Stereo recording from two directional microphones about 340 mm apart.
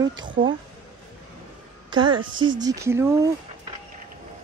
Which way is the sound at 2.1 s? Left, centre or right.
Right.